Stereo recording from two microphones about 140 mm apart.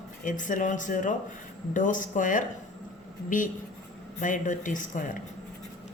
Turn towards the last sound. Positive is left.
turn(degrees=65)  # may be behind; listen again after turning